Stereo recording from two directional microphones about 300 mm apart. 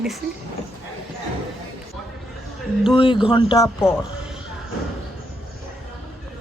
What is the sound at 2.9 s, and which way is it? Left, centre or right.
Speech, centre.